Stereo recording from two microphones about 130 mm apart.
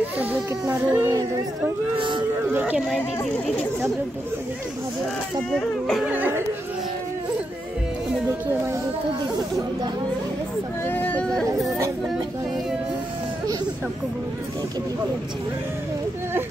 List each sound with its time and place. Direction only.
0.2 s speech: 15° right (ahead or behind)
2.0 s a sound: 40° right (ahead or behind)
5.5 s speech: 5° left (ahead or behind)
6.0 s speech: 15° right (ahead or behind)
10.9 s speech: 15° left (ahead or behind)